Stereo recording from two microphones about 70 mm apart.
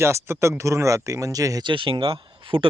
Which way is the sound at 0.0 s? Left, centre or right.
Right.